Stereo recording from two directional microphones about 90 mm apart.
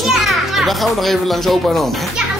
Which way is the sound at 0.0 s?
Centre (ahead or behind).